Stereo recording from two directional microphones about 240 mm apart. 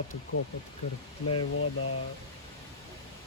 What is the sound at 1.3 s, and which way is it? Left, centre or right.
Speech, left.